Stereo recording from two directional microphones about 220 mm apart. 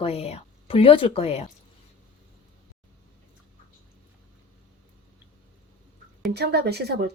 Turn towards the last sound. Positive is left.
turn(degrees=-50)  # may be behind; listen again after turning